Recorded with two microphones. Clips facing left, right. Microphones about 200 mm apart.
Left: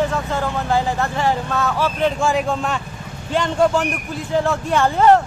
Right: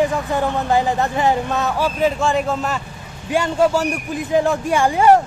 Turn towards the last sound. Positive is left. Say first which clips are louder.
# right 1 dB
turn(degrees=-10)  # may be behind; listen again after turning